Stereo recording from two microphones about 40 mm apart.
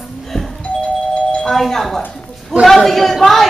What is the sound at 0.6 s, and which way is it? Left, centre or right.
Doorbell, left.